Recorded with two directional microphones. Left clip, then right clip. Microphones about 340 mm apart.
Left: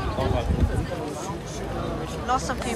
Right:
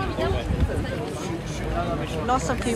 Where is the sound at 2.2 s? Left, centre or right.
Centre.